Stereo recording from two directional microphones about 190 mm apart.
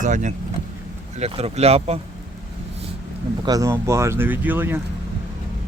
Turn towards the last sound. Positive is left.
turn(degrees=-10)  # may be behind; listen again after turning